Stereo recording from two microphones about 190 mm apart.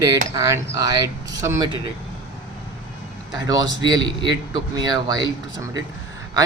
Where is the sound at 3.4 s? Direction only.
20° right (ahead or behind).